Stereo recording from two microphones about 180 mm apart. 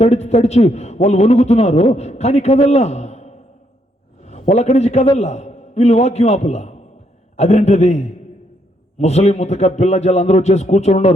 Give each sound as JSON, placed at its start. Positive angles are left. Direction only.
{"t": 0.0, "sound": "a man's voice", "side_deg": 35}